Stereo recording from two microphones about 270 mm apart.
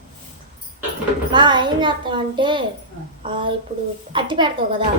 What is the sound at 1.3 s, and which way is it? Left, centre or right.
A child's voice, centre.